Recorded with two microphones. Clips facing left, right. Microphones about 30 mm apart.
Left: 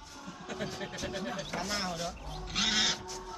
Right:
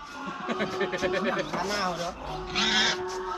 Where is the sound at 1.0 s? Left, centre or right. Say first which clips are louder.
Right 10 dB; right.